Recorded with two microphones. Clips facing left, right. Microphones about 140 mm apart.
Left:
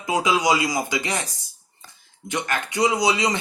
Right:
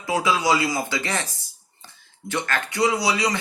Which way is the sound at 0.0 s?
20° left (ahead or behind).